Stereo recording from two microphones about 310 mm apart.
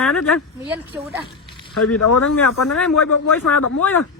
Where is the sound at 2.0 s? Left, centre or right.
Left.